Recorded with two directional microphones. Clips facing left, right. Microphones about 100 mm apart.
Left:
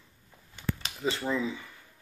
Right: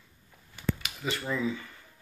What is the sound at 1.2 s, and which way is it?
Speech, 15° left (ahead or behind).